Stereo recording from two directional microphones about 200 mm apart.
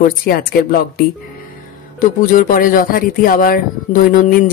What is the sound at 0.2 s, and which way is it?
Speech, 50° left (ahead or behind).